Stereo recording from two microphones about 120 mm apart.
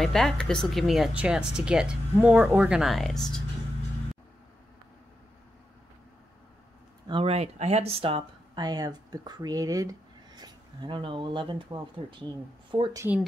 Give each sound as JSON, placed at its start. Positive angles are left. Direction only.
{"t": 0.0, "sound": "speech", "side_deg": 5}
{"t": 7.1, "sound": "speech", "side_deg": -55}
{"t": 8.5, "sound": "speech", "side_deg": -30}